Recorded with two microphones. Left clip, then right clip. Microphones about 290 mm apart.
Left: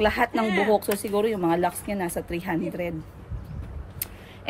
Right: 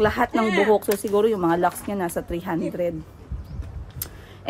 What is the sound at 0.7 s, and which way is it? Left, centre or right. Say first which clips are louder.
A woman's voice: right 3 dB; centre.